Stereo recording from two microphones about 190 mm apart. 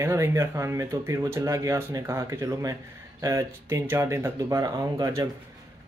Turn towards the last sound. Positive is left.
turn(degrees=-20)  # may be behind; listen again after turning